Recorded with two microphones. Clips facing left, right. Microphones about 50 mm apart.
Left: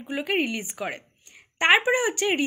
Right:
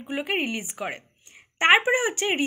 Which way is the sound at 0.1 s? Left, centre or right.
Centre.